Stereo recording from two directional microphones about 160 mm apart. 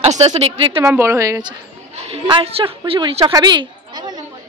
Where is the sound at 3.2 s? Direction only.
20° right (ahead or behind).